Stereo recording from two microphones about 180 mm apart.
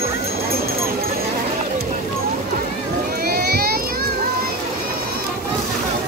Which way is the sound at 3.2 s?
60° right (ahead or behind).